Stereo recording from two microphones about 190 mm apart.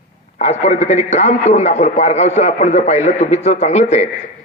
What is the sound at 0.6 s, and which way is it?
A man's voice, 35° left (ahead or behind).